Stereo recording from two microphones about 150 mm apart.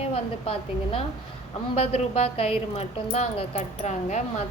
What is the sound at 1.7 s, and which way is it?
Speech, 45° left (ahead or behind).